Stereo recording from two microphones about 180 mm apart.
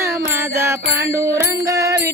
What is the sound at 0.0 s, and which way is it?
Music, 15° right (ahead or behind).